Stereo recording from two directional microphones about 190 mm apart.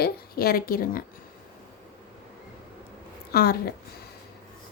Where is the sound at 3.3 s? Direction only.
55° left (ahead or behind).